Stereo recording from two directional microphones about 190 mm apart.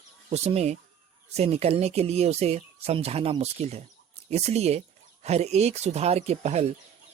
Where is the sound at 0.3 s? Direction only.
35° right (ahead or behind).